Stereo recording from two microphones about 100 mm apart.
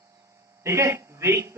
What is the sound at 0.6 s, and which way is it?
Speech, 30° right (ahead or behind).